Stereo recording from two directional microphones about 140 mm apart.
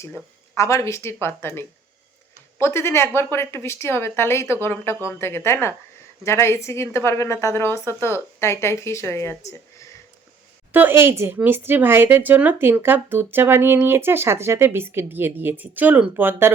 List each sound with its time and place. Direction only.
0.5 s a woman's voice: 20° left (ahead or behind)
9.4 s a sound: 20° left (ahead or behind)
10.7 s speech: 15° right (ahead or behind)